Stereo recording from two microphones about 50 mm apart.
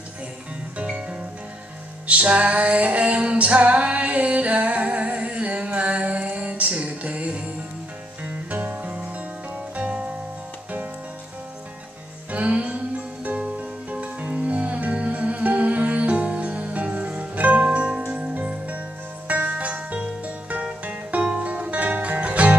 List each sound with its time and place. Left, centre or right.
2.0 s music: right
12.3 s music: right